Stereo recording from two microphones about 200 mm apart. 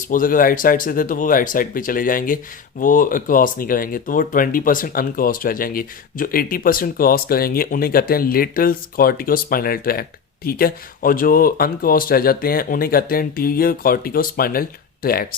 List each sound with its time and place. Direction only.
0.1 s speech: 45° left (ahead or behind)